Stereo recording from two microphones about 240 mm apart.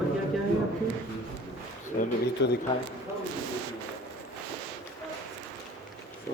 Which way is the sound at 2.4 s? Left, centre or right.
Left.